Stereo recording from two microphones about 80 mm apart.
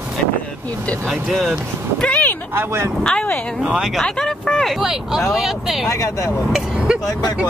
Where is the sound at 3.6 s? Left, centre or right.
Centre.